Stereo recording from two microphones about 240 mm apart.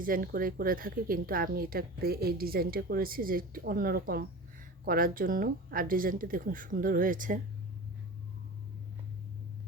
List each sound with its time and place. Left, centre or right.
0.0 s speech: right